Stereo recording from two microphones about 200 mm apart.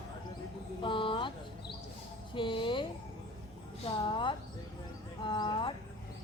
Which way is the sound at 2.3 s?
25° left (ahead or behind).